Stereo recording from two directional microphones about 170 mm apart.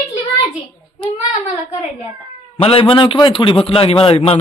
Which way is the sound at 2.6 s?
35° left (ahead or behind).